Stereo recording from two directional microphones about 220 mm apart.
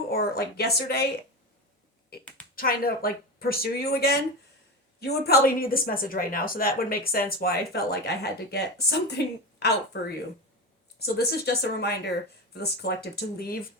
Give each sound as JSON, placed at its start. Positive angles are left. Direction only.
{"t": 0.1, "sound": "a woman's voice", "side_deg": 45}
{"t": 2.6, "sound": "a woman's voice", "side_deg": 45}
{"t": 11.0, "sound": "a woman's voice", "side_deg": 45}